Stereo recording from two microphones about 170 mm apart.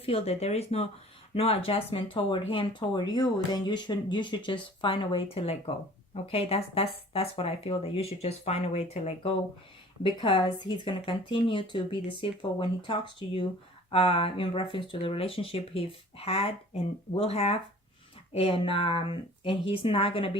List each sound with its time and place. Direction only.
0.0 s speech: 35° left (ahead or behind)
10.0 s speech: 30° left (ahead or behind)